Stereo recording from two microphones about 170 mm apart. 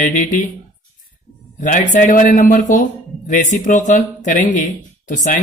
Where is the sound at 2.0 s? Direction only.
50° left (ahead or behind).